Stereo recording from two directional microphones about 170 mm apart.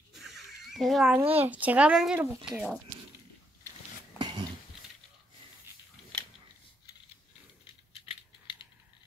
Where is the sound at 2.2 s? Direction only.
20° right (ahead or behind).